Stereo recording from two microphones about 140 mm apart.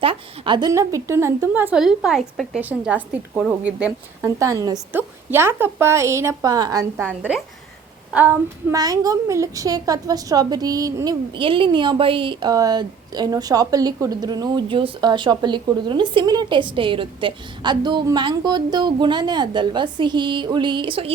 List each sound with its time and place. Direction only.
0.0 s a woman's voice: 40° right (ahead or behind)
0.7 s a woman's voice: 25° right (ahead or behind)
1.8 s a woman's voice: 5° right (ahead or behind)
2.6 s a woman's voice: 10° right (ahead or behind)
4.2 s a woman's voice: 20° right (ahead or behind)
4.9 s a woman's voice: 15° right (ahead or behind)
6.9 s a woman's voice: 10° right (ahead or behind)
8.7 s a woman's voice: 25° right (ahead or behind)
11.3 s a woman's voice: 40° right (ahead or behind)